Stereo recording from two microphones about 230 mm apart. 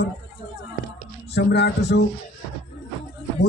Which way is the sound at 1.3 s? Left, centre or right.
Left.